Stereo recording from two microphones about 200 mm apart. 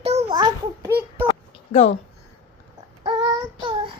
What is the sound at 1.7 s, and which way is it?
Speech, 30° left (ahead or behind).